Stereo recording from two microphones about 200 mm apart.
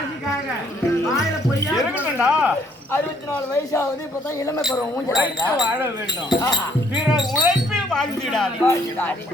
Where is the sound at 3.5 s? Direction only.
15° left (ahead or behind).